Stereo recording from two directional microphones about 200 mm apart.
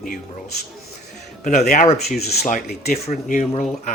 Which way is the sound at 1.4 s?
40° left (ahead or behind).